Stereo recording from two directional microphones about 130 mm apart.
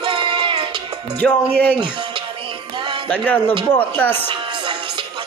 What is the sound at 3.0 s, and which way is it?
Speech, 10° left (ahead or behind).